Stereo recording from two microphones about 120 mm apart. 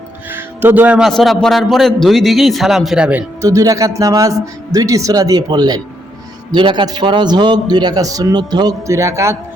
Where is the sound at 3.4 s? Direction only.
30° right (ahead or behind).